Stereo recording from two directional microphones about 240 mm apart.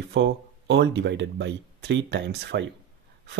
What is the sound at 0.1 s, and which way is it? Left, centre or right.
Speech, right.